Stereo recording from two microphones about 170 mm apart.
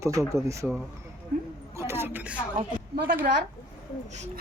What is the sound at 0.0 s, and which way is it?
Speech, 20° right (ahead or behind).